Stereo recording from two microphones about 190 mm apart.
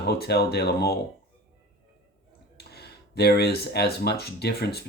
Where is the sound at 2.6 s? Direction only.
55° left (ahead or behind).